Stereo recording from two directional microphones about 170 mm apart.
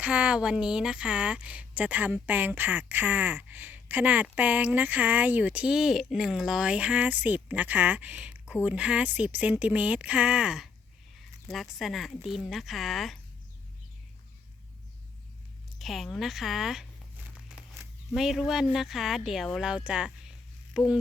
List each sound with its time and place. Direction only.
0.0 s a woman's voice: 5° right (ahead or behind)
15.8 s speech: centre (ahead or behind)
18.1 s speech: centre (ahead or behind)